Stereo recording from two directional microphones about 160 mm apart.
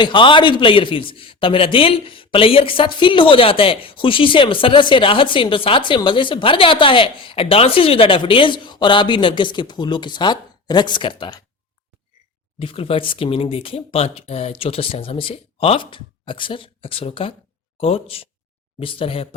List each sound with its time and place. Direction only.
0.0 s a man's voice: 30° left (ahead or behind)
12.5 s a man's voice: 35° left (ahead or behind)